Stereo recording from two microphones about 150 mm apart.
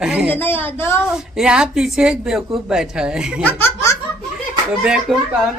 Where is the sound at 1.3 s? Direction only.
5° right (ahead or behind).